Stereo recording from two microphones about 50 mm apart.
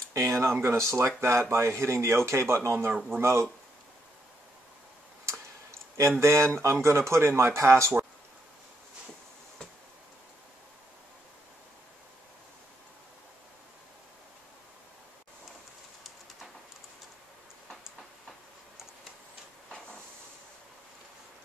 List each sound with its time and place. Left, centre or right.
0.1 s speech: right
5.9 s speech: right